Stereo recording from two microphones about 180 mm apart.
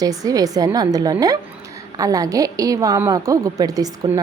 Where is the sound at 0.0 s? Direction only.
20° right (ahead or behind).